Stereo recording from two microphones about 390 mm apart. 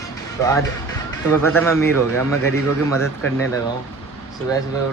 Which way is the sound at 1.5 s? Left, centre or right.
Centre.